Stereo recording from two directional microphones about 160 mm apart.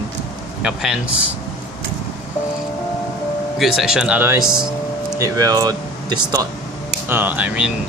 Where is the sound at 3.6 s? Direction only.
Centre (ahead or behind); by 6.5 s 25° right (ahead or behind).